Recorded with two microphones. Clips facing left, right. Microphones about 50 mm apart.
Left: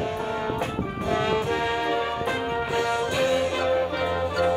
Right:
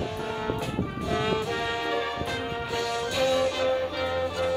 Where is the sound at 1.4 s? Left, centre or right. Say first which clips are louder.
Left 4 dB; left.